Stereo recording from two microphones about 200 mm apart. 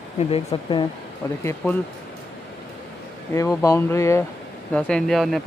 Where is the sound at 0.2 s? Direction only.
30° left (ahead or behind).